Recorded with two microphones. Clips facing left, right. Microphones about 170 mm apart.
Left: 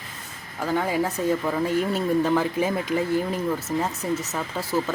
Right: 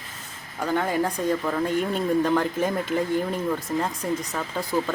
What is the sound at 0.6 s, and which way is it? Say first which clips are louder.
Speech: even; 5° left (ahead or behind).